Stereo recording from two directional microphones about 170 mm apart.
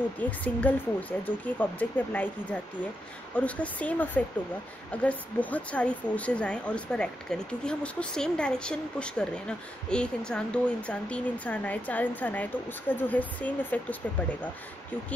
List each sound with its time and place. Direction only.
0.4 s speech: 10° left (ahead or behind)